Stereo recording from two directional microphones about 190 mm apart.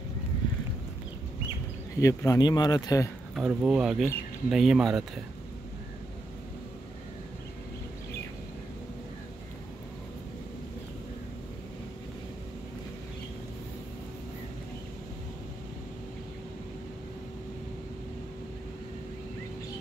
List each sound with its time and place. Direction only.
2.0 s speech: 15° left (ahead or behind)
3.3 s speech: centre (ahead or behind)